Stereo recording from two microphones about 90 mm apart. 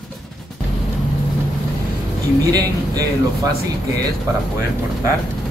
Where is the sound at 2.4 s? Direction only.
45° right (ahead or behind).